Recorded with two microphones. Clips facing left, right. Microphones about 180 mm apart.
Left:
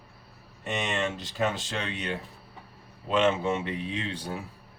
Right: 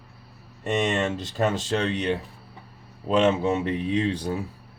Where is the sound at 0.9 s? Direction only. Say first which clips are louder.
Right 5 dB; 40° right (ahead or behind).